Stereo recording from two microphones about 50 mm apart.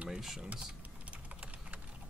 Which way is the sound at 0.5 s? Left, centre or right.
Right.